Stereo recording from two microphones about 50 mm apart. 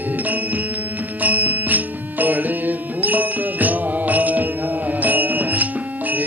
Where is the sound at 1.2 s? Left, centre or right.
Right.